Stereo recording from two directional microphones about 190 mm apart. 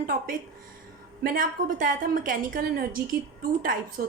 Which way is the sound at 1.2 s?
50° right (ahead or behind).